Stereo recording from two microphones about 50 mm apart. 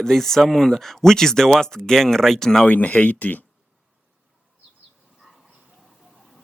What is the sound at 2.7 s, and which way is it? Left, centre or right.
Speech, left.